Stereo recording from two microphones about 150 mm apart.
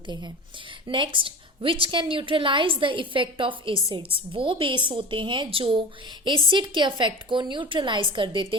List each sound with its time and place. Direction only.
0.9 s a woman's voice: 35° right (ahead or behind)